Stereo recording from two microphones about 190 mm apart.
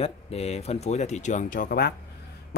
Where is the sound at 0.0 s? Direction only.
35° left (ahead or behind).